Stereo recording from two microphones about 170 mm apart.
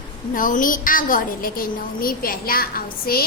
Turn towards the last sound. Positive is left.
turn(degrees=60)  # may be behind; listen again after turning